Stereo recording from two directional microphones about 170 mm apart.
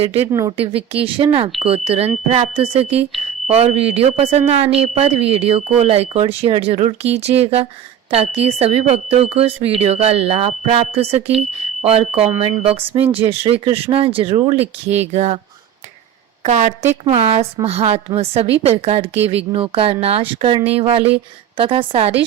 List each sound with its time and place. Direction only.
0.0 s speech: 35° right (ahead or behind)
0.3 s speech: 15° right (ahead or behind)
0.5 s speech: 35° right (ahead or behind)
16.4 s speech: 45° right (ahead or behind)